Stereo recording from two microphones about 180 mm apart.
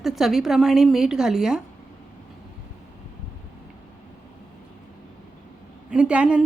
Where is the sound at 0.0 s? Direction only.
Centre (ahead or behind).